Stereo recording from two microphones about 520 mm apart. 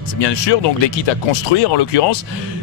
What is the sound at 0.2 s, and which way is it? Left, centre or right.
Speech, left.